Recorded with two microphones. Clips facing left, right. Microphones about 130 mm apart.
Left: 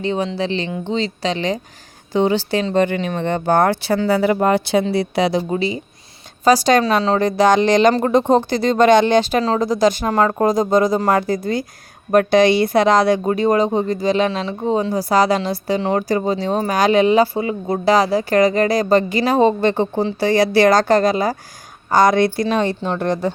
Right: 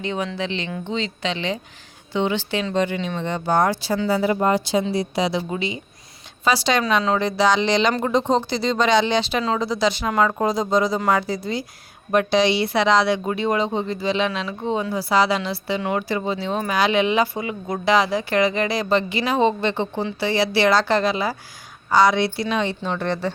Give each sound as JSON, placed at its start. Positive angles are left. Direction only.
{"t": 0.0, "sound": "speech", "side_deg": 35}
{"t": 5.3, "sound": "speech", "side_deg": 40}
{"t": 7.2, "sound": "speech", "side_deg": 45}